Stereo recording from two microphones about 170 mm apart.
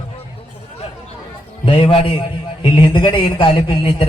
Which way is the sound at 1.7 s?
30° left (ahead or behind).